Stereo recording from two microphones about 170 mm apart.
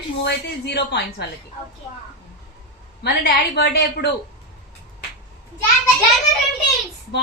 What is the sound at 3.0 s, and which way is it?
A woman's voice, 75° left (ahead or behind).